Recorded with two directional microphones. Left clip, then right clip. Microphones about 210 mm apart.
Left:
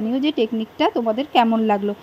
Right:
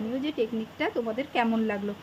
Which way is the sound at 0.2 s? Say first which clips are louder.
Left 9 dB; 25° left (ahead or behind).